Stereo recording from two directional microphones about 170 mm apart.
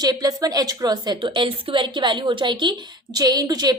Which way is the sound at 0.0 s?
20° right (ahead or behind).